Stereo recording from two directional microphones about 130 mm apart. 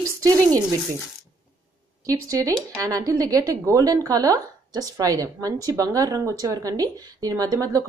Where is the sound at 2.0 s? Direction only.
25° right (ahead or behind).